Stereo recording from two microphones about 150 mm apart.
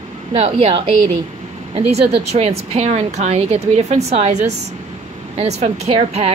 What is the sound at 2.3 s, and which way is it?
A woman's voice, 45° right (ahead or behind).